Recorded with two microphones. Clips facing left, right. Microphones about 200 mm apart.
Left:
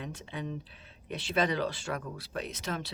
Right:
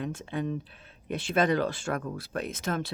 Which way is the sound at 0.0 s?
50° right (ahead or behind).